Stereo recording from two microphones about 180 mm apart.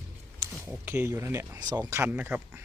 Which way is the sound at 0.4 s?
20° right (ahead or behind).